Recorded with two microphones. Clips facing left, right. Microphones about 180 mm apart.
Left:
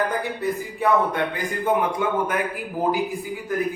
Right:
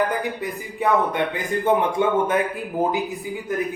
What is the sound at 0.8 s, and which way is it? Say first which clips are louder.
Speech: even; 20° right (ahead or behind).